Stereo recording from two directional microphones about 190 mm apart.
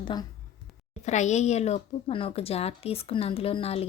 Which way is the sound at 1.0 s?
40° left (ahead or behind).